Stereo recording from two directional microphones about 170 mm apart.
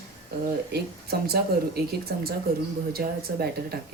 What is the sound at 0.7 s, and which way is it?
Speech, 65° right (ahead or behind).